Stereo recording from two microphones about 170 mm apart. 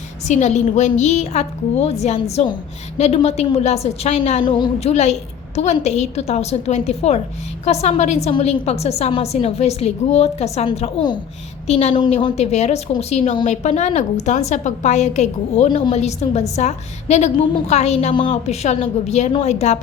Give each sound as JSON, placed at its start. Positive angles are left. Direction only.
{"t": 0.3, "sound": "a woman's voice", "side_deg": 45}